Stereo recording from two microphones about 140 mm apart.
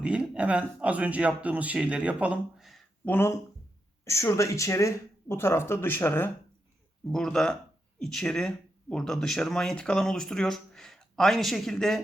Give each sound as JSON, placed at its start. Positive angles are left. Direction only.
{"t": 0.0, "sound": "speech", "side_deg": -10}
{"t": 3.0, "sound": "speech", "side_deg": 15}